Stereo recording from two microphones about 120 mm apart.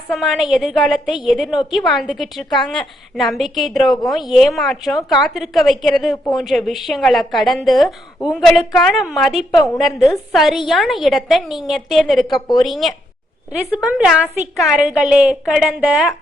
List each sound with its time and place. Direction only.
0.1 s a woman's voice: centre (ahead or behind)